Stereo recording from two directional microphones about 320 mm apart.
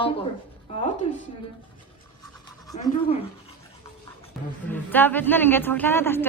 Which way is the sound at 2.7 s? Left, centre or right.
Centre.